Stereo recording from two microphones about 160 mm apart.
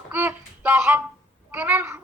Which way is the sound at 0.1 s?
10° right (ahead or behind).